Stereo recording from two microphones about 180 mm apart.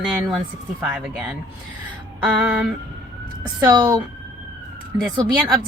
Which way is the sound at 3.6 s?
20° right (ahead or behind).